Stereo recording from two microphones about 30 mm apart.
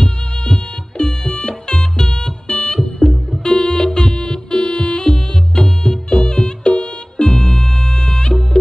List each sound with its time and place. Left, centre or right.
0.0 s music: left
3.4 s music: left
7.2 s music: centre